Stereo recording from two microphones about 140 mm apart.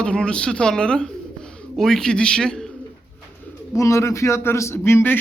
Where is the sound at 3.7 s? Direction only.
20° left (ahead or behind).